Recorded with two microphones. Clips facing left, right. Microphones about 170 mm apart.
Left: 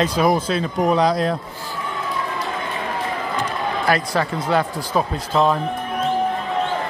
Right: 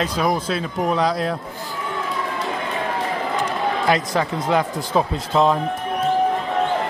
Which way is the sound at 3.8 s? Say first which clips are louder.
Left 1 dB; 20° right (ahead or behind).